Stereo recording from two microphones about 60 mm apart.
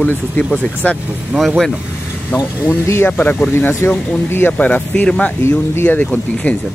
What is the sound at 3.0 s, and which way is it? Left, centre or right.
Speech, left.